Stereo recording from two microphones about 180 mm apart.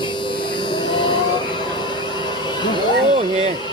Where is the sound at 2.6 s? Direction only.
25° left (ahead or behind).